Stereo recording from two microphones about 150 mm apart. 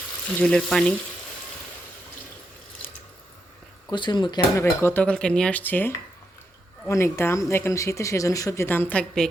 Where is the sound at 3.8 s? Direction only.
30° left (ahead or behind).